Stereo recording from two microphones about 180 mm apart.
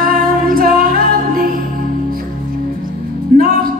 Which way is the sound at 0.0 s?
55° right (ahead or behind).